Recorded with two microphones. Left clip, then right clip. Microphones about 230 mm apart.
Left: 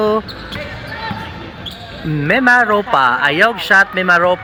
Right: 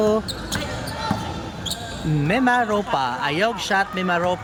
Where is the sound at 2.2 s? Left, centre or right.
Centre.